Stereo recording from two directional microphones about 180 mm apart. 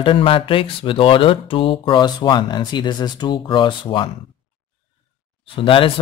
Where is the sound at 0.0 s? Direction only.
30° left (ahead or behind).